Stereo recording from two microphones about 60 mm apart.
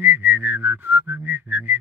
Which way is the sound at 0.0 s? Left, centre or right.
Right.